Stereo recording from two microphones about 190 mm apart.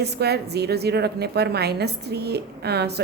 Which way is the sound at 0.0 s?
60° right (ahead or behind).